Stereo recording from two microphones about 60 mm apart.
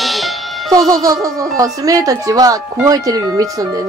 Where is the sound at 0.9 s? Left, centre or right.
Right.